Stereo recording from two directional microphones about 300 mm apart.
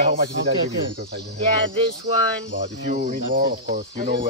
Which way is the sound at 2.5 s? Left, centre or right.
Right.